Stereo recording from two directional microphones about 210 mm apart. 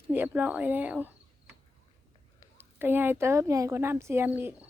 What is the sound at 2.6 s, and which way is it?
Speech, 10° right (ahead or behind).